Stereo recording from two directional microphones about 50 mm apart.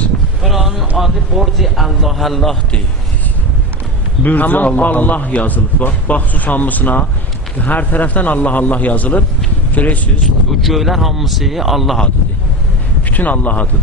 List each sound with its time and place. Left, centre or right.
0.4 s a sound: centre
4.2 s a man's voice: left
10.6 s a man's voice: centre
13.1 s a man's voice: left